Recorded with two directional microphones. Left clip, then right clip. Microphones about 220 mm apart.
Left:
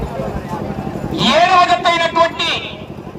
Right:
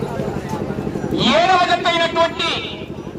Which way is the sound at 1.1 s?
45° left (ahead or behind).